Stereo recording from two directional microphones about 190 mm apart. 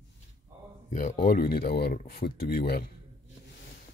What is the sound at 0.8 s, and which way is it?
A man's voice, 40° left (ahead or behind).